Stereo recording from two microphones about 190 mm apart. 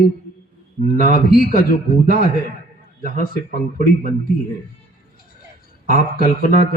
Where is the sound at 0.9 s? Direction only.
50° left (ahead or behind).